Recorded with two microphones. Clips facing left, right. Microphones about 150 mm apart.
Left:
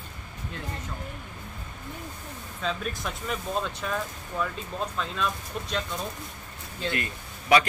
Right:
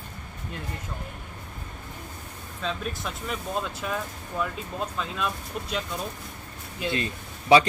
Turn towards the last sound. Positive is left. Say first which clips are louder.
# right 4 dB
turn(degrees=-25)  # may be behind; listen again after turning